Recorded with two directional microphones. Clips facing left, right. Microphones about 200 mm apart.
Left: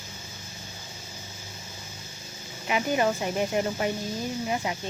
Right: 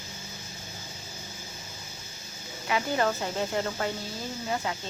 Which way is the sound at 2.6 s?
15° left (ahead or behind).